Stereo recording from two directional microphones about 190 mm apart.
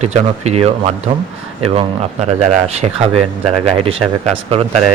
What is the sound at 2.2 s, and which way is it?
Speech, 35° right (ahead or behind).